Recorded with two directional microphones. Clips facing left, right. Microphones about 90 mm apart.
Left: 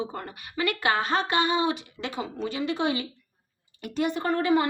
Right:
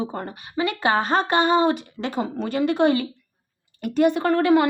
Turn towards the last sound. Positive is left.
turn(degrees=-70)  # may be behind; listen again after turning